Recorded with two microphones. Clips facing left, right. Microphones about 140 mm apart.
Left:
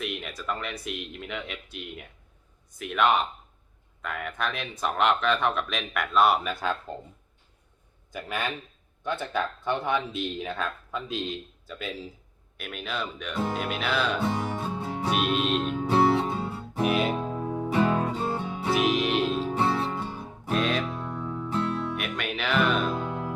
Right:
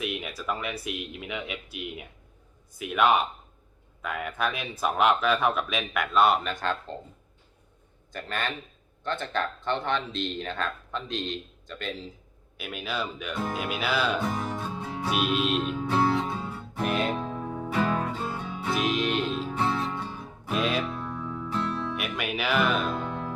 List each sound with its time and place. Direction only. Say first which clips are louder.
0.0 s speech: right 1 dB; 5° right (ahead or behind)
8.1 s speech: left 1 dB; 10° left (ahead or behind)
15.1 s music: even; centre (ahead or behind)
15.8 s music: left 4 dB; 30° left (ahead or behind)
16.8 s music: left 2 dB; 5° left (ahead or behind); by 18.7 s 25° left (ahead or behind)
18.7 s music: left 2 dB; 5° left (ahead or behind)
19.4 s music: left 2 dB; 30° left (ahead or behind)
20.5 s music: left 1 dB; 5° right (ahead or behind)
21.2 s music: left 1 dB; 20° left (ahead or behind)
21.8 s music: even; centre (ahead or behind)